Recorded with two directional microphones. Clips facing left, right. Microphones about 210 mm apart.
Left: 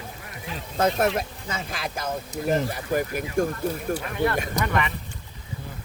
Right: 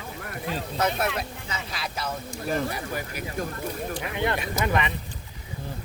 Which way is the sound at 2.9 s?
45° left (ahead or behind).